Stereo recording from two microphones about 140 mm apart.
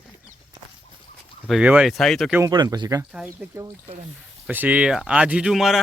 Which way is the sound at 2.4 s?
30° right (ahead or behind).